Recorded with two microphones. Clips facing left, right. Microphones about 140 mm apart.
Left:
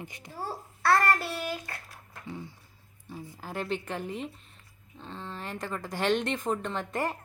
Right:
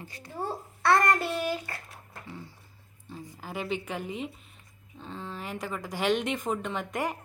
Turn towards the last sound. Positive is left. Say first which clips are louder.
# even
turn(degrees=-15)  # may be behind; listen again after turning